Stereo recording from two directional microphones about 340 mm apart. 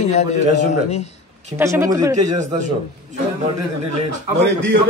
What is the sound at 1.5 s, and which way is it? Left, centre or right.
Speech, centre.